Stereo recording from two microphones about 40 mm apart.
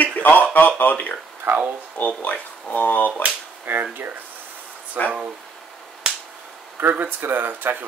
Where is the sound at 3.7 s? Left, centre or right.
Right.